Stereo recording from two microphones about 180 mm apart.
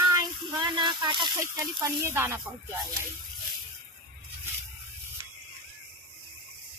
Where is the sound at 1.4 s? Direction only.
15° right (ahead or behind).